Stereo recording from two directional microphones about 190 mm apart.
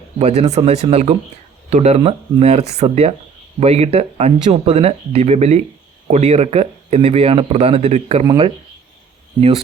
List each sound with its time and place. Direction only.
0.2 s speech: 35° right (ahead or behind)